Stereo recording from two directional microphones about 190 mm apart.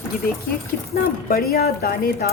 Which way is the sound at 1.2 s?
50° left (ahead or behind).